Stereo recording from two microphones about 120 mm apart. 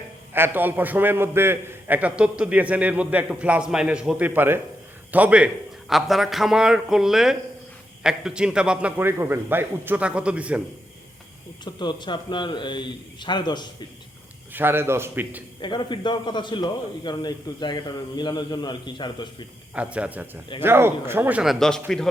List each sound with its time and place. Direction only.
0.3 s a man's voice: 15° right (ahead or behind)
4.4 s a man's voice: 20° right (ahead or behind)
9.0 s a man's voice: 20° right (ahead or behind)
11.6 s a man's voice: 40° left (ahead or behind)
14.5 s a man's voice: 20° right (ahead or behind)
15.6 s a man's voice: 40° left (ahead or behind)
19.7 s a man's voice: 10° right (ahead or behind)
21.4 s speech: centre (ahead or behind)